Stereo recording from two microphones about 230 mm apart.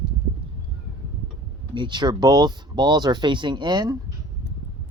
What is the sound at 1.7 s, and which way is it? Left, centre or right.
Speech, centre.